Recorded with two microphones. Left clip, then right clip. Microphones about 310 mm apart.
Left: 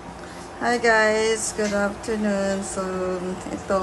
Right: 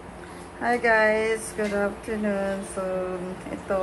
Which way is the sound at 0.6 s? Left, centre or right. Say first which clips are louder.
Left 2 dB; centre.